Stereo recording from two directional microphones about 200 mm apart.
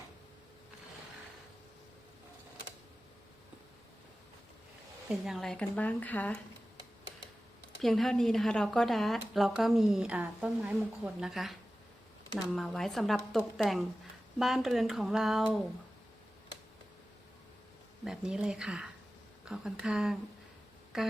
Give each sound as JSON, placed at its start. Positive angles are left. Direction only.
{"t": 5.0, "sound": "speech", "side_deg": 0}
{"t": 7.8, "sound": "speech", "side_deg": 0}
{"t": 12.5, "sound": "speech", "side_deg": 0}
{"t": 18.0, "sound": "speech", "side_deg": -5}